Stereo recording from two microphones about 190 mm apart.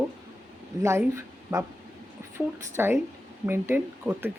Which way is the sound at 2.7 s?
10° right (ahead or behind).